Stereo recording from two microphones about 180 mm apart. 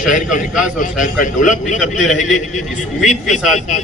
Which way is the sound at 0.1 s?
45° left (ahead or behind).